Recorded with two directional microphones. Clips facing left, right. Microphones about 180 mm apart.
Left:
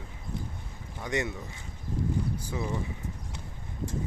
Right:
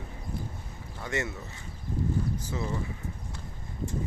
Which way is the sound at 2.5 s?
10° left (ahead or behind).